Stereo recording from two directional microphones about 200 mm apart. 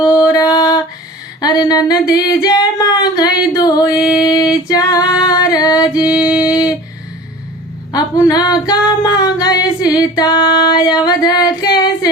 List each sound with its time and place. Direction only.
0.0 s music: 20° left (ahead or behind)
1.4 s female singing: 20° left (ahead or behind)
6.1 s music: 5° right (ahead or behind)
6.4 s a sound: 20° left (ahead or behind)
7.9 s female singing: 20° left (ahead or behind)